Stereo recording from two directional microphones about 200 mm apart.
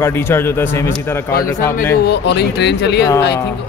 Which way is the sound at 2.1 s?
55° left (ahead or behind).